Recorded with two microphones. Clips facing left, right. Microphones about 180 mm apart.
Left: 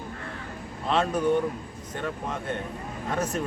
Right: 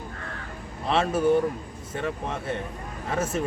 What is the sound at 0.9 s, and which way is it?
Speech, 5° right (ahead or behind).